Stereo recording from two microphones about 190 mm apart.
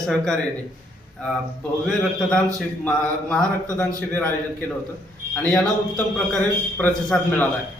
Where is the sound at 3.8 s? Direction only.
10° left (ahead or behind).